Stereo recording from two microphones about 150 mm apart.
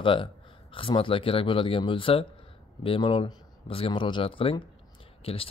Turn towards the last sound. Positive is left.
turn(degrees=40)  # may be behind; listen again after turning